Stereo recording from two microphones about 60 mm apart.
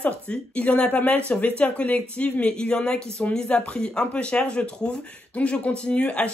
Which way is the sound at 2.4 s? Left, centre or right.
Centre.